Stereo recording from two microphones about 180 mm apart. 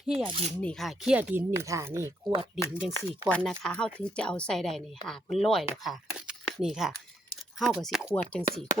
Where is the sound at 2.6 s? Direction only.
10° left (ahead or behind).